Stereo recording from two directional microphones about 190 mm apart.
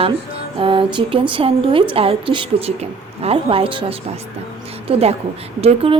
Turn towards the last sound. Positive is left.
turn(degrees=-30)  # may be behind; listen again after turning